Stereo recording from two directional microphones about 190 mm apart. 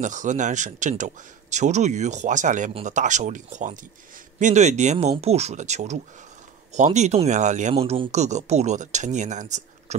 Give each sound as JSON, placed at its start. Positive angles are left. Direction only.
{"t": 0.0, "sound": "speech", "side_deg": -40}